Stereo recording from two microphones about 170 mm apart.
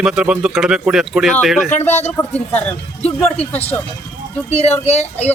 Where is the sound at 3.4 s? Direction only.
35° left (ahead or behind).